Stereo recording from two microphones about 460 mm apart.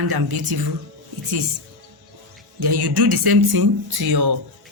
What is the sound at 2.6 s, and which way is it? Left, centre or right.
Speech, right.